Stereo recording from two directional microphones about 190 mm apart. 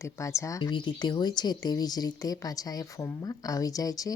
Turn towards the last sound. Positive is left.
turn(degrees=20)  # may be behind; listen again after turning